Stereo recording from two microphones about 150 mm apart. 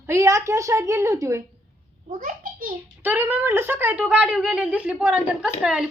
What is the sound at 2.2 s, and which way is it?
Speech, 65° right (ahead or behind).